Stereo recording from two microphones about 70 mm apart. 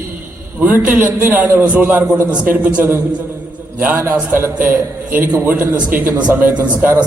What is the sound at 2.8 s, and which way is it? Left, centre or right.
A man's voice, right.